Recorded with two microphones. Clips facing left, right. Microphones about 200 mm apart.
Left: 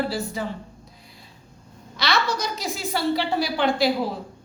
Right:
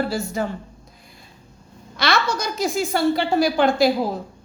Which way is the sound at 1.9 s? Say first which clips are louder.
Right 3 dB; 50° right (ahead or behind).